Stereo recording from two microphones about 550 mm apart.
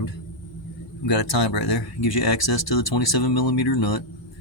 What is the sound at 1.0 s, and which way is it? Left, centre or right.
Speech, left.